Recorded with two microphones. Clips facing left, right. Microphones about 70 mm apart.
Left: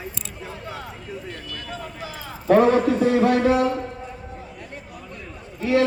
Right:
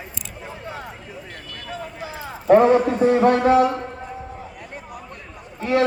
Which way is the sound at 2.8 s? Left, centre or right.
Right.